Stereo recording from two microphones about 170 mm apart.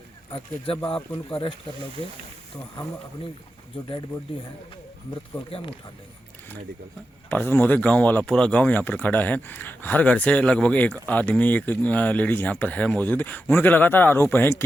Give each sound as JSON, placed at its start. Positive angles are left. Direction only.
{"t": 0.3, "sound": "speech", "side_deg": 30}
{"t": 5.5, "sound": "speech", "side_deg": 30}
{"t": 7.3, "sound": "speech", "side_deg": 10}